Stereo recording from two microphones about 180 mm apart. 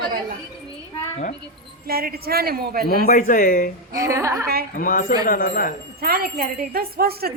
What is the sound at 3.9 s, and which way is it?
Speech, 15° right (ahead or behind).